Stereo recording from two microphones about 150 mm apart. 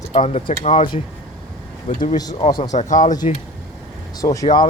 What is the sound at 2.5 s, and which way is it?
Speech, 30° left (ahead or behind).